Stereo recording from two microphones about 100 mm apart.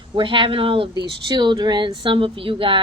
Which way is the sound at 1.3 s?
45° right (ahead or behind).